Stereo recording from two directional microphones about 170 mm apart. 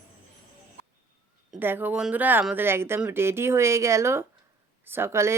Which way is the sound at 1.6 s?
10° right (ahead or behind).